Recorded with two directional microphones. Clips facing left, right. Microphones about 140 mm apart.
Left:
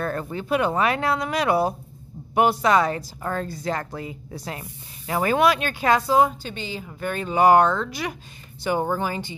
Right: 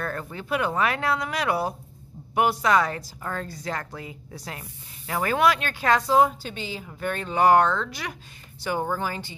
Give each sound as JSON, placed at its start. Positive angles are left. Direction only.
{"t": 0.0, "sound": "a woman's voice", "side_deg": 25}